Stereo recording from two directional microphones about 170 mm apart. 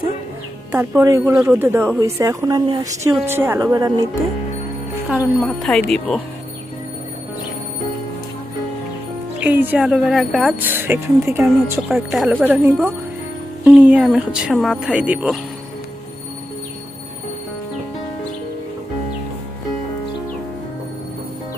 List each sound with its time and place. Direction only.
0.7 s speech: 15° right (ahead or behind)
5.0 s speech: 5° right (ahead or behind)
9.4 s speech: 10° right (ahead or behind)
10.7 s speech: 10° right (ahead or behind)
11.4 s speech: centre (ahead or behind)